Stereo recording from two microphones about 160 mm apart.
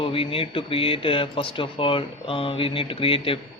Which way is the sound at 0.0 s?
35° left (ahead or behind).